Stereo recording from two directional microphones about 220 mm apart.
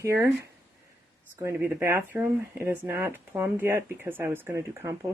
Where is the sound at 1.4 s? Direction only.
10° right (ahead or behind).